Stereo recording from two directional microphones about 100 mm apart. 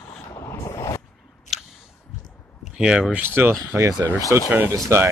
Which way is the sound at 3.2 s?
20° right (ahead or behind).